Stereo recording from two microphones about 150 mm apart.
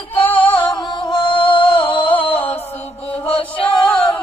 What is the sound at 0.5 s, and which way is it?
Music, 30° left (ahead or behind).